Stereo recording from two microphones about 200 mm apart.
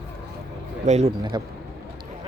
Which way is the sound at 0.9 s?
35° right (ahead or behind).